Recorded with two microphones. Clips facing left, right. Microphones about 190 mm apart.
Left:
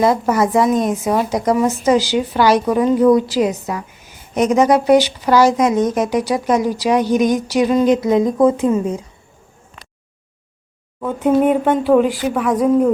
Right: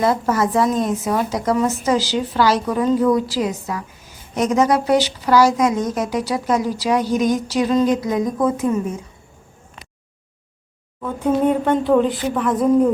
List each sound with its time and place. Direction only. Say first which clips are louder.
0.0 s speech: left 3 dB; 15° left (ahead or behind)
8.0 s speech: left 6 dB; 25° left (ahead or behind)
11.0 s speech: left 3 dB; 20° left (ahead or behind)
11.6 s speech: left 2 dB; 10° left (ahead or behind)